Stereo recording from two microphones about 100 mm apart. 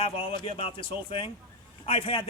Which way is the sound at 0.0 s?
65° left (ahead or behind).